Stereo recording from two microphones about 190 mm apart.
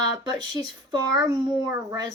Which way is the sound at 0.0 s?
20° right (ahead or behind).